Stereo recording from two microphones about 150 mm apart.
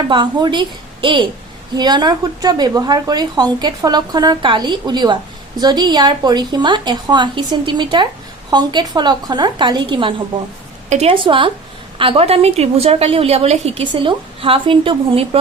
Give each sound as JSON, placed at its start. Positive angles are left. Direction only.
{"t": 0.1, "sound": "a woman's voice", "side_deg": -30}
{"t": 10.8, "sound": "a woman's voice", "side_deg": -45}
{"t": 13.8, "sound": "a woman's voice", "side_deg": -30}